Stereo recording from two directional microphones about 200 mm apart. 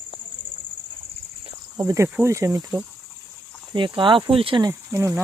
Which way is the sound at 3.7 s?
25° right (ahead or behind).